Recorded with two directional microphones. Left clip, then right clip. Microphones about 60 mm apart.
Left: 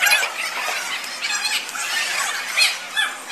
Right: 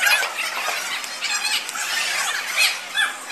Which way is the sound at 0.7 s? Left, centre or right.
Centre.